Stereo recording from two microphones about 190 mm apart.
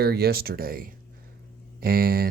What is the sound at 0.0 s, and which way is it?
Speech, 55° right (ahead or behind).